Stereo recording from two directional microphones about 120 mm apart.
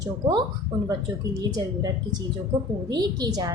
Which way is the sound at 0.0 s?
35° right (ahead or behind).